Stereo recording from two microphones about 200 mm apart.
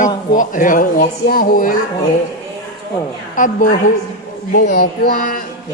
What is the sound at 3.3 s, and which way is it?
Speech, 40° left (ahead or behind).